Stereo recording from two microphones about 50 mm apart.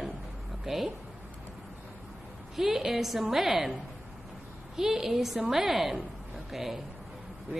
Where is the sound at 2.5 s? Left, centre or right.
Centre.